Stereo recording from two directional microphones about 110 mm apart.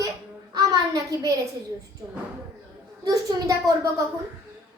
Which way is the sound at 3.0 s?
35° right (ahead or behind).